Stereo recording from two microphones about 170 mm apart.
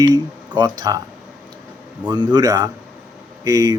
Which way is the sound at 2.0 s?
25° right (ahead or behind).